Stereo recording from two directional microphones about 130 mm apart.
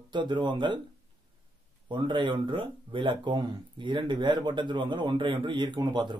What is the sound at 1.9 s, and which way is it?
Speech, 35° right (ahead or behind).